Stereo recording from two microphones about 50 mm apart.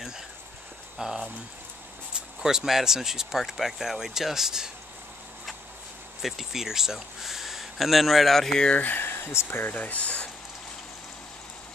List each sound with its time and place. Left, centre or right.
0.9 s speech: centre
6.2 s speech: centre
8.7 s speech: left
9.8 s speech: left